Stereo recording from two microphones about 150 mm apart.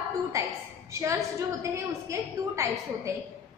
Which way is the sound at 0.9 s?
20° right (ahead or behind).